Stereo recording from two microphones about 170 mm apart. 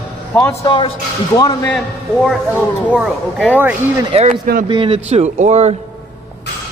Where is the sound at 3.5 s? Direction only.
10° right (ahead or behind).